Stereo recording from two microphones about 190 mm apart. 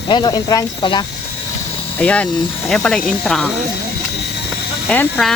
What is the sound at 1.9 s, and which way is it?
Speech, 5° left (ahead or behind).